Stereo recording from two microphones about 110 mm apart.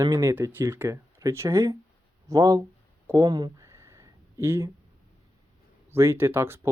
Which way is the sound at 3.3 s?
35° right (ahead or behind).